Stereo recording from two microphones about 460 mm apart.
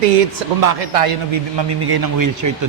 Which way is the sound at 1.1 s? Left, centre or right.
Right.